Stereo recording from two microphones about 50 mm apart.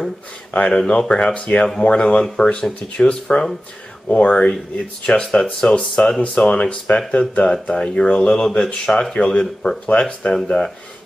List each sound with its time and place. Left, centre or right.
0.5 s speech: left
2.2 s speech: centre